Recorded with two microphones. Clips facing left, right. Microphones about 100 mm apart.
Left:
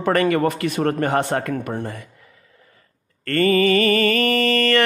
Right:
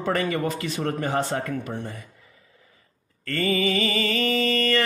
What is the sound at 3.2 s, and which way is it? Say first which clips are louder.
Mantra: left 7 dB; 60° left (ahead or behind).